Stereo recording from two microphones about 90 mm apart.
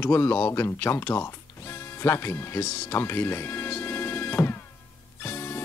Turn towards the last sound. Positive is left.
turn(degrees=25)  # may be behind; listen again after turning